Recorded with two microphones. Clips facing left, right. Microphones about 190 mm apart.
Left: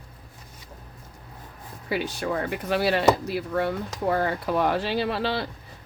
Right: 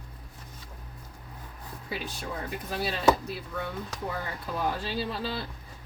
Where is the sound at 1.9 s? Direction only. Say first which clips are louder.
Left 9 dB; 75° left (ahead or behind).